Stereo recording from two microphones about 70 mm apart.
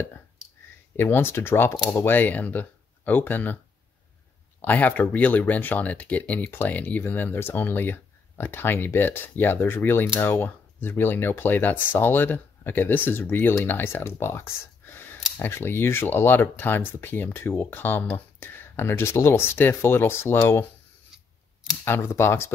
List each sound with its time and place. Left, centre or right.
0.9 s speech: left
4.6 s speech: left
14.9 s a sound: left
15.3 s speech: left
21.8 s speech: left